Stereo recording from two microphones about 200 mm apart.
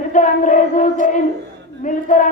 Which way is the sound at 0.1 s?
40° left (ahead or behind).